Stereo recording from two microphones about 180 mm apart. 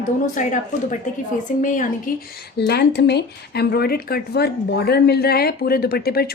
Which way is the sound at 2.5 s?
65° left (ahead or behind).